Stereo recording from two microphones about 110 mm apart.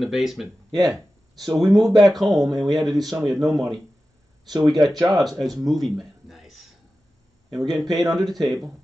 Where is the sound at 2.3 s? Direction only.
Centre (ahead or behind).